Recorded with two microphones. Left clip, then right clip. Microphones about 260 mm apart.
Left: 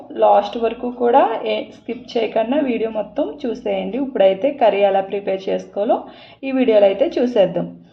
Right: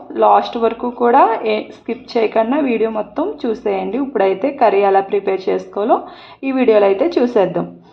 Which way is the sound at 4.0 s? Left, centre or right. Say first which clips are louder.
Left 3 dB; right.